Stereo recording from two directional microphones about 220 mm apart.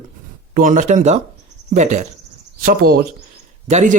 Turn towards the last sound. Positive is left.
turn(degrees=-30)  # may be behind; listen again after turning